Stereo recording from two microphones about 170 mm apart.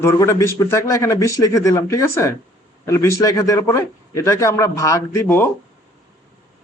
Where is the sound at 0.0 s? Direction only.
15° left (ahead or behind).